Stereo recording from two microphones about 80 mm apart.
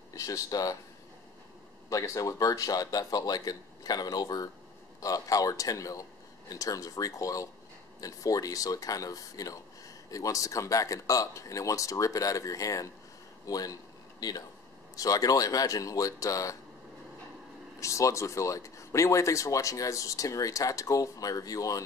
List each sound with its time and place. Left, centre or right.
0.1 s speech: left
1.9 s speech: left
17.7 s speech: left